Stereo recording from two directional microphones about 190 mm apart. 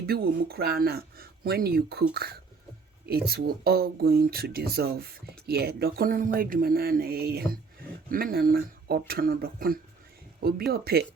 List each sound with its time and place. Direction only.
0.0 s speech: 55° right (ahead or behind)
3.1 s speech: 55° right (ahead or behind)